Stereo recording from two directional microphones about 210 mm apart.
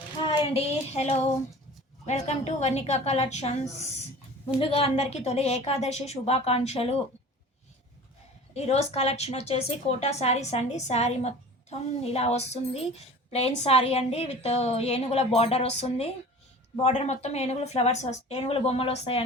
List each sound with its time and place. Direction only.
0.5 s a woman's voice: 30° left (ahead or behind)
8.5 s a woman's voice: 30° left (ahead or behind)